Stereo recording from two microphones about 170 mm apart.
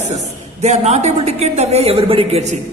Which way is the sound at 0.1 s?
40° right (ahead or behind).